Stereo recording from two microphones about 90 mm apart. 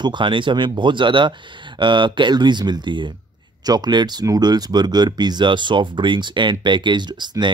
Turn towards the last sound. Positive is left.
turn(degrees=-55)  # may be behind; listen again after turning